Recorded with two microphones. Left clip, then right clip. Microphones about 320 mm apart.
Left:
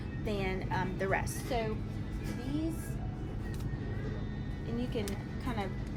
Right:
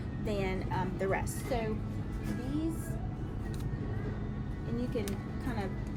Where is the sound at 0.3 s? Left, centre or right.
Centre.